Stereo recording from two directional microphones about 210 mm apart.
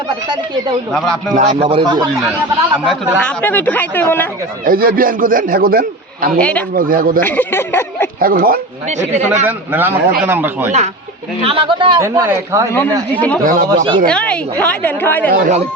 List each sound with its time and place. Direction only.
0.3 s speech: 20° right (ahead or behind)
0.9 s speech: 5° left (ahead or behind)
1.3 s speech: 30° right (ahead or behind)
2.7 s speech: centre (ahead or behind)
4.6 s speech: 45° right (ahead or behind)
7.2 s speech: 10° left (ahead or behind)
8.2 s a man's voice: 45° right (ahead or behind)
9.5 s a man's voice: 10° right (ahead or behind)
11.4 s speech: 25° right (ahead or behind)
13.4 s a man's voice: 40° right (ahead or behind)
13.7 s speech: 25° right (ahead or behind)
14.1 s speech: 5° left (ahead or behind)
15.3 s a man's voice: 40° right (ahead or behind)